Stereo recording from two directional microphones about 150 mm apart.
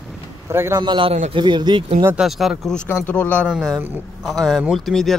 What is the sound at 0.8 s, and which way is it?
Speech, 35° right (ahead or behind).